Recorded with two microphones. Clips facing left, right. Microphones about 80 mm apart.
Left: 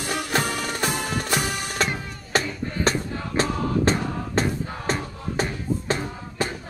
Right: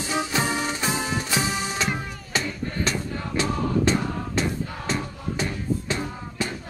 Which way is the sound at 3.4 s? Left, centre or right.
Left.